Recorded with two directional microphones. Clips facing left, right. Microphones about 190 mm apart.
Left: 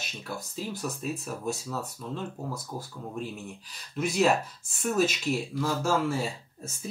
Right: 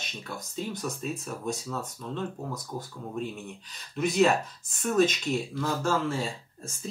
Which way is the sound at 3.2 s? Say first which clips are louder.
Right 3 dB; 5° left (ahead or behind).